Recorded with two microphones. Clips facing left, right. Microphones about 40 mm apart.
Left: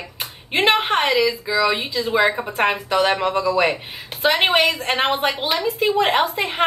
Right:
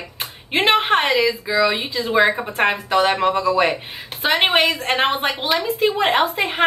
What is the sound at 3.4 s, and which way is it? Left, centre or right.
Speech, centre.